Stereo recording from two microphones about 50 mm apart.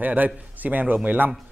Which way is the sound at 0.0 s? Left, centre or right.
Right.